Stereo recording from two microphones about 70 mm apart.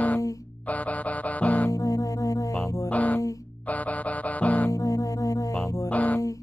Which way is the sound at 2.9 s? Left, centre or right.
Left.